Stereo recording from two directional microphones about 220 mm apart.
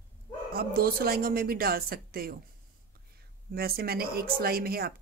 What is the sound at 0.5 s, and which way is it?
A woman's voice, 40° right (ahead or behind).